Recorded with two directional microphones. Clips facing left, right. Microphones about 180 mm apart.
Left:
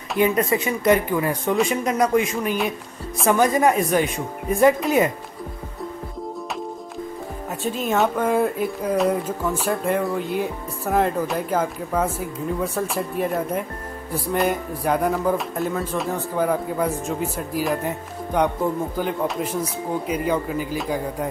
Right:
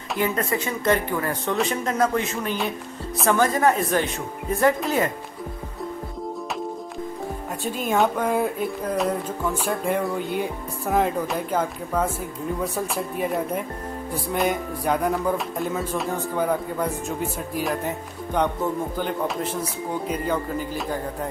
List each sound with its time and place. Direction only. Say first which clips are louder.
0.2 s speech: left 5 dB; 15° left (ahead or behind)
7.6 s a sound: left 1 dB; centre (ahead or behind)
20.1 s speech: left 3 dB; 5° left (ahead or behind)